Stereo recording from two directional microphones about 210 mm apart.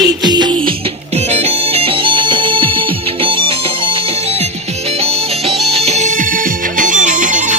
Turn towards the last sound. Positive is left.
turn(degrees=-35)  # may be behind; listen again after turning